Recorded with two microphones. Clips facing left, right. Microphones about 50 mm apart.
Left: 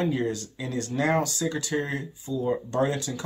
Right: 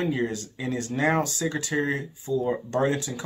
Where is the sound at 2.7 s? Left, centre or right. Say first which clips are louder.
Right 1 dB; right.